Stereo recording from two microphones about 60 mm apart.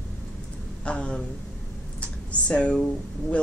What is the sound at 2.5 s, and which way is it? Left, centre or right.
Speech, centre.